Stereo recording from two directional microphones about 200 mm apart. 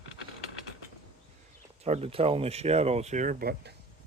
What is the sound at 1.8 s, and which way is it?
Speech, 30° right (ahead or behind).